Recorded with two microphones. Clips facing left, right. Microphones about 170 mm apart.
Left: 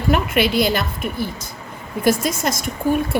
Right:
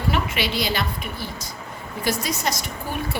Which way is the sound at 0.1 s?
55° left (ahead or behind).